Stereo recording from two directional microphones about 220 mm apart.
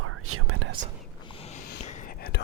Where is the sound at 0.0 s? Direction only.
80° right.